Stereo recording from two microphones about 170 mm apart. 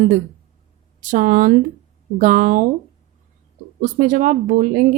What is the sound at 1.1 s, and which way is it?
Speech, 50° right (ahead or behind).